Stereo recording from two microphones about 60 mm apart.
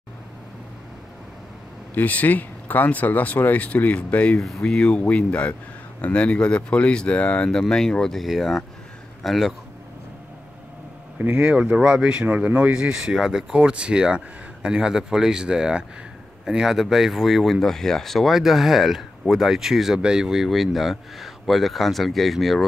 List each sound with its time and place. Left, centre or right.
2.0 s speech: left
4.4 s speech: centre
7.5 s a man's voice: centre
11.1 s speech: right; by 22.7 s centre